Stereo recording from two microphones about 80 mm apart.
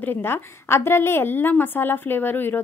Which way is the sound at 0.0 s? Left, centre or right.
Left.